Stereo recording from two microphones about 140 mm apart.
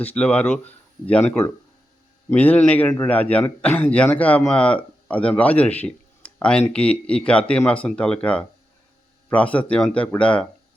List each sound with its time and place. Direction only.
0.0 s a man's voice: 10° left (ahead or behind)